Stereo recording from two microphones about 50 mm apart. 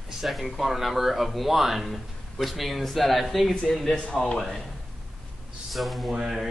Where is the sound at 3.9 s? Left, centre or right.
Centre.